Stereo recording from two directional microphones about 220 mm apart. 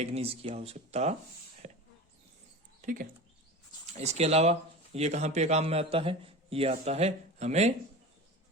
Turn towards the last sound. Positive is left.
turn(degrees=-30)  # may be behind; listen again after turning